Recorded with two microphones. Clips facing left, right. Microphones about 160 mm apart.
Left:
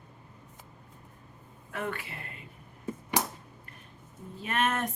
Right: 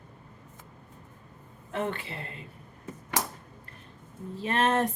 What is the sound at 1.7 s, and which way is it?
Speech, 25° right (ahead or behind).